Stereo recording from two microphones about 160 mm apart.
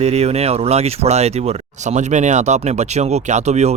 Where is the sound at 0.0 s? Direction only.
40° right (ahead or behind).